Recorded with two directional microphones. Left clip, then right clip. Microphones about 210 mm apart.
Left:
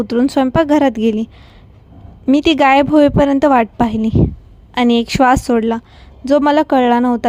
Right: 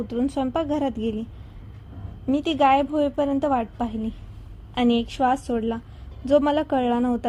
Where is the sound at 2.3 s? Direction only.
40° left (ahead or behind).